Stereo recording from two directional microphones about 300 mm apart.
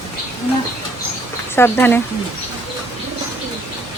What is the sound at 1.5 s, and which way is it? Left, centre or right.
Speech, centre.